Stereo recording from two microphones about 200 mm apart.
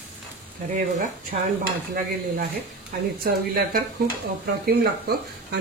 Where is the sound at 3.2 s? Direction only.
50° right (ahead or behind).